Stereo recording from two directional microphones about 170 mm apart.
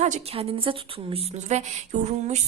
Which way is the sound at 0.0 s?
40° right (ahead or behind).